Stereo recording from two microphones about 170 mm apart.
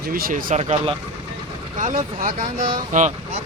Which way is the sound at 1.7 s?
50° right (ahead or behind).